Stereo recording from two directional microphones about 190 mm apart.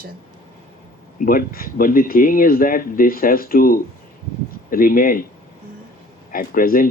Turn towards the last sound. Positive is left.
turn(degrees=50)  # may be behind; listen again after turning